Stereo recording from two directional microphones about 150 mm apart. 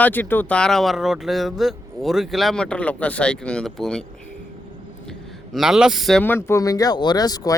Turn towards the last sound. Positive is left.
turn(degrees=25)  # may be behind; listen again after turning